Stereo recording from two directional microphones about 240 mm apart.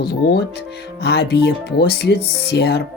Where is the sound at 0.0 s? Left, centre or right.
Left.